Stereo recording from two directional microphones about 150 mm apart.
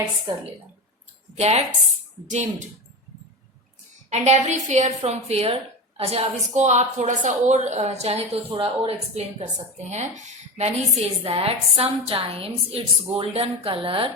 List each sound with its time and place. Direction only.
1.4 s a woman's voice: 45° right (ahead or behind)
4.1 s a woman's voice: 50° right (ahead or behind)